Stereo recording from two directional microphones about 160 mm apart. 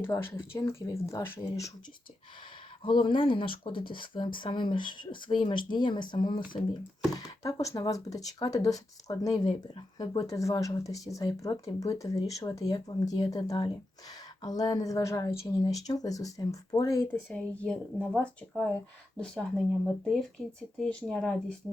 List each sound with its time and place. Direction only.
0.0 s speech: 15° left (ahead or behind)
2.8 s speech: 30° left (ahead or behind)
7.4 s speech: 20° left (ahead or behind)
20.7 s speech: 5° left (ahead or behind)